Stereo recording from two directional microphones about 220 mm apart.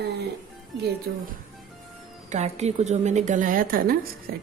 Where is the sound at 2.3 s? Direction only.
30° right (ahead or behind).